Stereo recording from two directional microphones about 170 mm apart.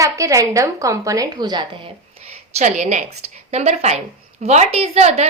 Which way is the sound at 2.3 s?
45° right (ahead or behind).